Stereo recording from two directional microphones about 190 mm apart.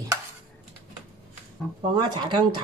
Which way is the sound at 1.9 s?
25° right (ahead or behind).